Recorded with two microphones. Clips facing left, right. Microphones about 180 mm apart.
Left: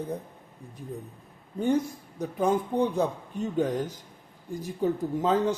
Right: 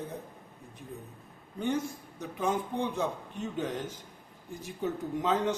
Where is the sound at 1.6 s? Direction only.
35° left (ahead or behind).